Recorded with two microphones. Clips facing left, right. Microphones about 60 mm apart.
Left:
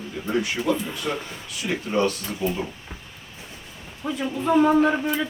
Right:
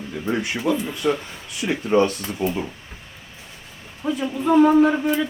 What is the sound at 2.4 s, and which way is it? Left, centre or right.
Speech, right.